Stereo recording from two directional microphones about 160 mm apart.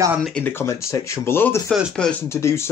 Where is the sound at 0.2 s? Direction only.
10° left (ahead or behind).